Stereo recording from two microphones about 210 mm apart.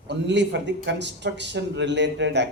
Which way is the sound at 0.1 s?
55° right (ahead or behind).